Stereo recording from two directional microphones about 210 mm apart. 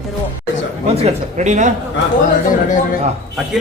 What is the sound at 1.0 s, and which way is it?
Speech, 35° right (ahead or behind).